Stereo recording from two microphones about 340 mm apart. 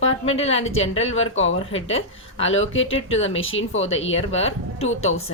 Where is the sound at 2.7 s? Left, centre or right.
Left.